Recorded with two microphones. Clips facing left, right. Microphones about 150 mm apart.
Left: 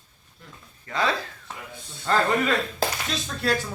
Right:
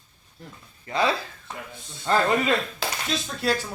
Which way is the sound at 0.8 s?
20° right (ahead or behind).